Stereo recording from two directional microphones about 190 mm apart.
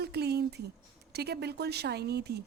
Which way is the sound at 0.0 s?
60° right (ahead or behind).